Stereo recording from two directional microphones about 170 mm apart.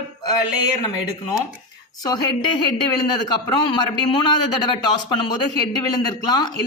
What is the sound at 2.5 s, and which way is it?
Speech, 25° left (ahead or behind).